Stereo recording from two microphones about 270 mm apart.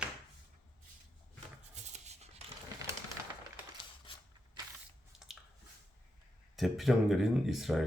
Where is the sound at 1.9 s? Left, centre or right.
Right.